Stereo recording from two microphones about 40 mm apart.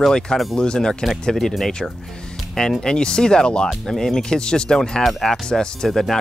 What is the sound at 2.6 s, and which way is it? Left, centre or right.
Speech, centre.